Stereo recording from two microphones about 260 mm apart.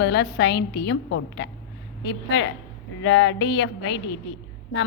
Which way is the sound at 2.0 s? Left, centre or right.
Left.